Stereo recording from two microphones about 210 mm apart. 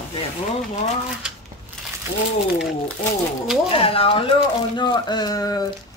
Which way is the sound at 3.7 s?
25° left (ahead or behind).